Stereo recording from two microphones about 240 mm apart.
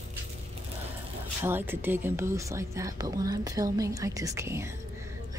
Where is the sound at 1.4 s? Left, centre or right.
Centre.